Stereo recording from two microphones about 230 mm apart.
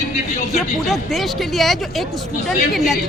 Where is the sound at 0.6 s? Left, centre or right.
Centre.